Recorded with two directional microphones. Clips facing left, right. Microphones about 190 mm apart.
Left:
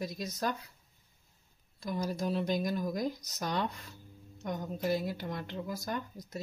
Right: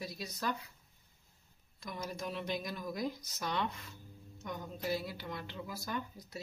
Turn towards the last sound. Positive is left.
turn(degrees=45)  # may be behind; listen again after turning